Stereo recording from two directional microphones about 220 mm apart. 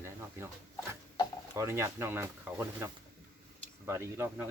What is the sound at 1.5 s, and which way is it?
Speech, 15° right (ahead or behind).